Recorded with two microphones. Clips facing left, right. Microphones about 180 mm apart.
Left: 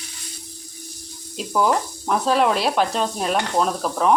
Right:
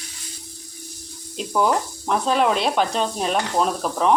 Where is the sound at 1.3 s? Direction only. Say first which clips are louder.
Even; centre (ahead or behind).